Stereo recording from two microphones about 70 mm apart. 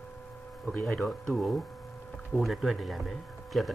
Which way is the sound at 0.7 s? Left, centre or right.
Centre.